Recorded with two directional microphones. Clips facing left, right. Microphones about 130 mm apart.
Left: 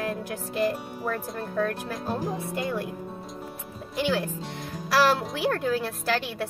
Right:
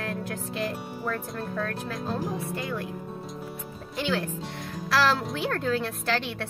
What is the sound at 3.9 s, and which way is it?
Speech, 5° left (ahead or behind).